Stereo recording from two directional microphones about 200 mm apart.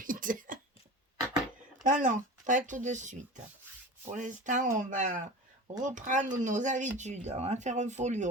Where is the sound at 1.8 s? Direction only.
40° right (ahead or behind).